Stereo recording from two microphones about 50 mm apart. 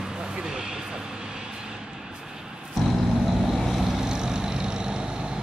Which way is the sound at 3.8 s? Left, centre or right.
Centre.